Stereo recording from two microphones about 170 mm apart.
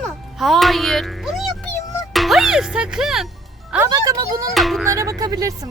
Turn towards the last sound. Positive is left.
turn(degrees=-20)  # may be behind; listen again after turning